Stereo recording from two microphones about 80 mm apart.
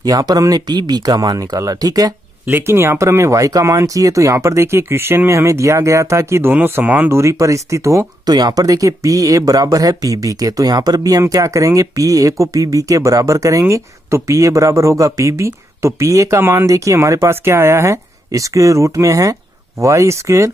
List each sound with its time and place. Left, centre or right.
0.0 s speech: right
2.4 s speech: right
6.5 s speech: right
8.3 s speech: right